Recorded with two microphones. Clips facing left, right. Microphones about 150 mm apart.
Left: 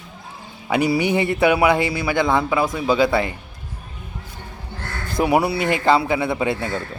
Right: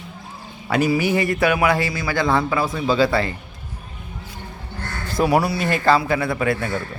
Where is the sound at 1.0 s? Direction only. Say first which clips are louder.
Left 1 dB; 20° left (ahead or behind).